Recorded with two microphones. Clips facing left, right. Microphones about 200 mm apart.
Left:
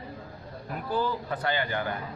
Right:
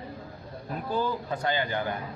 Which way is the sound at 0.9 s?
15° right (ahead or behind).